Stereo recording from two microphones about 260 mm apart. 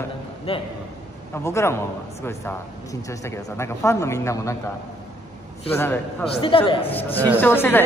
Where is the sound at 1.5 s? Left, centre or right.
Centre.